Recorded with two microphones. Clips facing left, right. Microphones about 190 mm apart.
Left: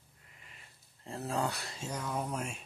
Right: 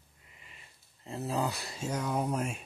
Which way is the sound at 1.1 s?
Centre (ahead or behind).